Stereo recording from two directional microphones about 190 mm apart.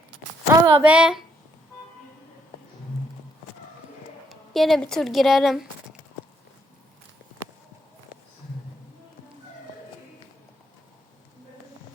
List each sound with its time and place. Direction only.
0.5 s speech: 20° right (ahead or behind)
0.8 s speech: 5° right (ahead or behind)
4.3 s speech: centre (ahead or behind)